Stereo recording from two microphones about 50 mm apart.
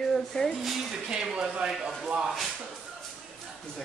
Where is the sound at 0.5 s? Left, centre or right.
Centre.